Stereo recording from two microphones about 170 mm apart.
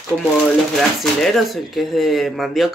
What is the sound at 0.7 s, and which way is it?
Speech, centre (ahead or behind).